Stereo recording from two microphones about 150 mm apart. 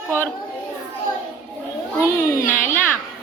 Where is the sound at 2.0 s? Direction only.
20° left (ahead or behind).